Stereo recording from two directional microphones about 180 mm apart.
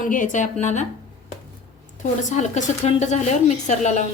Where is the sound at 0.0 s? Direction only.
50° left (ahead or behind).